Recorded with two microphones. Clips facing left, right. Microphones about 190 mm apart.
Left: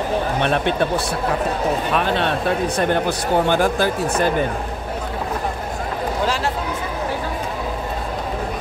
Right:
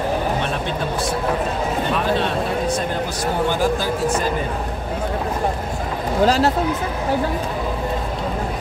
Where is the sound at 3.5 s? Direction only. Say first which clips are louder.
Left 2 dB; 60° left (ahead or behind).